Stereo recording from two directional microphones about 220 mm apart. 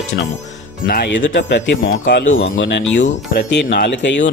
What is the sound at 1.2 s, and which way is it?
Speech, 55° left (ahead or behind).